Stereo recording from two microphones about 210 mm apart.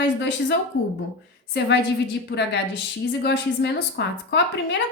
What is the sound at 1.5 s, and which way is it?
Speech, 55° left (ahead or behind).